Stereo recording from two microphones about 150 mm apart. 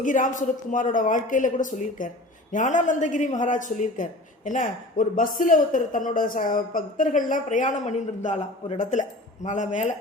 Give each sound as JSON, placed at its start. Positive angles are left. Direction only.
{"t": 0.0, "sound": "a man's voice", "side_deg": 60}